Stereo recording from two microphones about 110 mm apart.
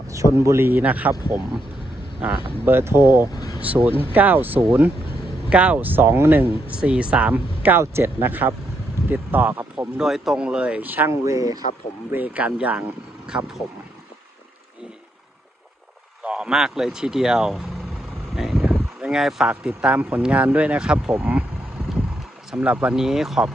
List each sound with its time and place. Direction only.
0.1 s a man's voice: 30° right (ahead or behind)
2.2 s speech: 10° right (ahead or behind)
2.6 s a man's voice: 20° right (ahead or behind)
10.0 s speech: 5° right (ahead or behind)
11.3 s a man's voice: 30° right (ahead or behind)
12.1 s speech: 15° right (ahead or behind)
16.2 s speech: 10° right (ahead or behind)
22.5 s speech: 10° right (ahead or behind)